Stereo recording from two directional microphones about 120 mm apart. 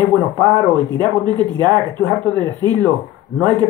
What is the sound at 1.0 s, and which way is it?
Speech, 40° right (ahead or behind).